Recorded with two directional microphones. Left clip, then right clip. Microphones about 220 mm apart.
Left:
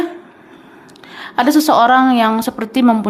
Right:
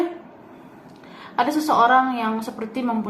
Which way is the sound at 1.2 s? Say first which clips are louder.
Left 8 dB; 50° left (ahead or behind).